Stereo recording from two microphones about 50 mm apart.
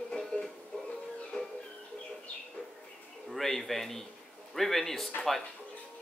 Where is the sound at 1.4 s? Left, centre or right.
Left.